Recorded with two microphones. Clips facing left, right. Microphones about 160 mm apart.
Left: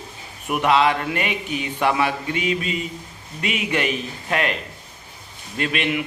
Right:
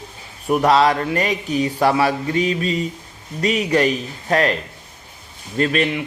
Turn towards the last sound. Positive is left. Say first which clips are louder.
# right 5 dB
turn(degrees=-35)  # may be behind; listen again after turning